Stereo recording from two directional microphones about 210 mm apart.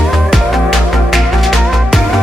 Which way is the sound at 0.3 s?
Centre (ahead or behind).